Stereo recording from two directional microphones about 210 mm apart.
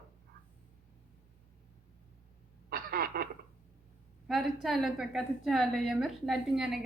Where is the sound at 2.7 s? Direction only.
45° right (ahead or behind).